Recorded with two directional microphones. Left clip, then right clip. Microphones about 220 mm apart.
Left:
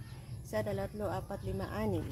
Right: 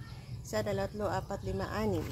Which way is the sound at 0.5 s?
15° right (ahead or behind).